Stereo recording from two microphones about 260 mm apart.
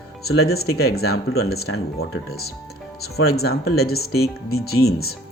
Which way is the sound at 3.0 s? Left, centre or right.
Left.